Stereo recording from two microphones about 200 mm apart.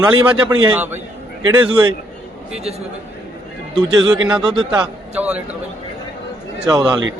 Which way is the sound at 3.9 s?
20° right (ahead or behind).